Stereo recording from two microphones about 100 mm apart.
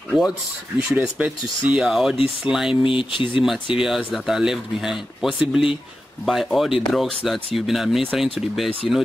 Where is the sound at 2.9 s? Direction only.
60° left (ahead or behind).